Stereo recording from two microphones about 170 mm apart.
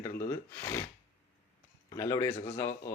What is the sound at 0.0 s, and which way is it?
Snort, 15° left (ahead or behind).